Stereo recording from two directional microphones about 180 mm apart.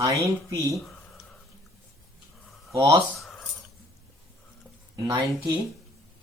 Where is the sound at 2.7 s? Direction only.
15° right (ahead or behind).